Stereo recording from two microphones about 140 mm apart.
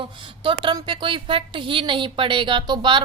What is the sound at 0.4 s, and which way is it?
A woman's voice, 35° right (ahead or behind).